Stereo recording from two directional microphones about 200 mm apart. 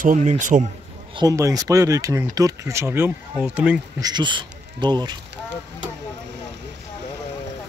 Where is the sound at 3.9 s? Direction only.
20° right (ahead or behind).